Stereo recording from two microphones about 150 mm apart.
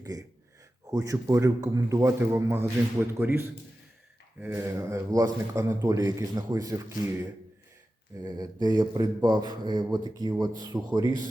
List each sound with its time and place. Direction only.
0.0 s a man's voice: 25° right (ahead or behind)
8.2 s a man's voice: 25° right (ahead or behind)